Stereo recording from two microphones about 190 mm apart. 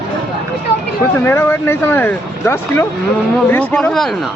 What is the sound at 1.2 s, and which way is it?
A man's voice, 10° left (ahead or behind).